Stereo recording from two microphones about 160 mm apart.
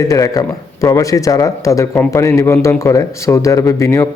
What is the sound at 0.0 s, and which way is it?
Speech, 20° left (ahead or behind).